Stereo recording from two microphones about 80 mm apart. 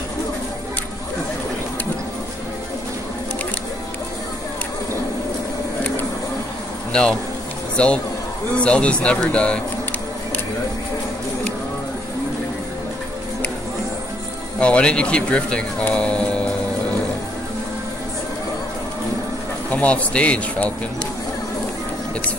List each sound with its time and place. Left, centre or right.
6.9 s speech: centre
14.6 s speech: centre
19.7 s speech: centre